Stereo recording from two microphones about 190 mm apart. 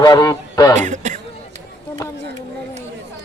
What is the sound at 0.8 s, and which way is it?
Speech, 40° right (ahead or behind).